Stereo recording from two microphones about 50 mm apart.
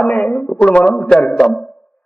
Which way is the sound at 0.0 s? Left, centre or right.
Left.